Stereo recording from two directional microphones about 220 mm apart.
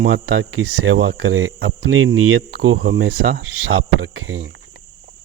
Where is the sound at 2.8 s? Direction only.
55° right (ahead or behind).